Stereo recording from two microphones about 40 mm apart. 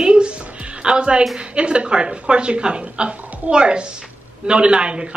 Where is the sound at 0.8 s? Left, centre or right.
Right.